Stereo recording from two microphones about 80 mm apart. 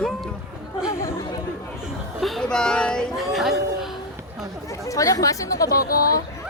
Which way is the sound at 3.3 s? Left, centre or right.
Centre.